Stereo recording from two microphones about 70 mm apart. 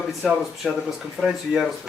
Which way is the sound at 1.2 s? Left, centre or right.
Left.